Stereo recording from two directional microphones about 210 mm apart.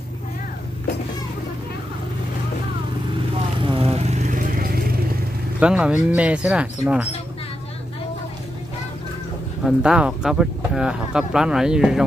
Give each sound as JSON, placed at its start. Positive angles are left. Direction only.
{"t": 3.5, "sound": "vehicle", "side_deg": -25}
{"t": 5.6, "sound": "speech", "side_deg": -5}
{"t": 9.6, "sound": "speech", "side_deg": -5}